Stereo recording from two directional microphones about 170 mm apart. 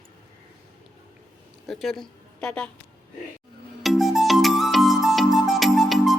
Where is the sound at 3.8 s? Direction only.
Centre (ahead or behind).